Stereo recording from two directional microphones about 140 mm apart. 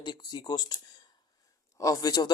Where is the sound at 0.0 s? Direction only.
30° left (ahead or behind).